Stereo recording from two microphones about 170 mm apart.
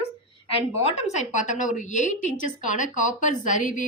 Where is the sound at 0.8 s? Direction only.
40° left (ahead or behind).